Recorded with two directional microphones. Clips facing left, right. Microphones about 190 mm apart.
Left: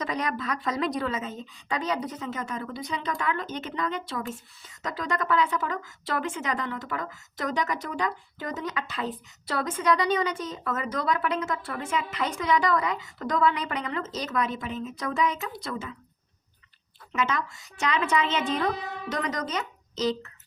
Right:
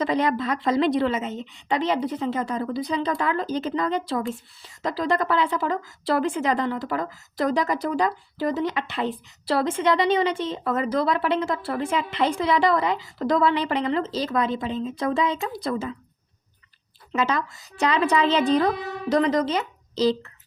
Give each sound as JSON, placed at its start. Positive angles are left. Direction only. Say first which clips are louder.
{"t": 0.0, "sound": "a woman's voice", "louder": "right 7 dB", "side_deg": -30}
{"t": 17.1, "sound": "a woman's voice", "louder": "right 4 dB", "side_deg": -35}